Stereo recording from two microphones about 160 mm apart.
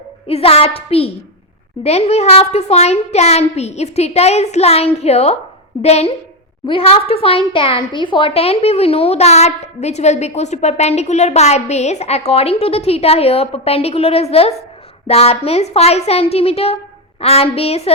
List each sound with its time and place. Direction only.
0.3 s speech: 40° left (ahead or behind)